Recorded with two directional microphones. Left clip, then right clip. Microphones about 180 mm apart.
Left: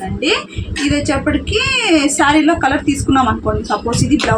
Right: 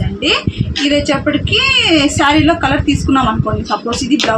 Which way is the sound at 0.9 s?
10° right (ahead or behind).